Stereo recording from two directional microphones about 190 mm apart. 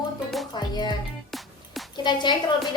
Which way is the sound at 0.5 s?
25° left (ahead or behind).